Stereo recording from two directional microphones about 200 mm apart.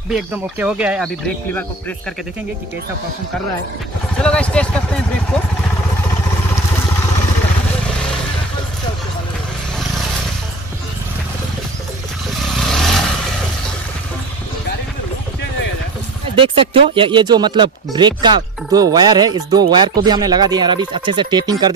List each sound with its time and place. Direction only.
0.1 s speech: 5° right (ahead or behind)
4.2 s speech: 5° left (ahead or behind)
12.4 s vehicle: centre (ahead or behind)
16.3 s speech: 25° right (ahead or behind)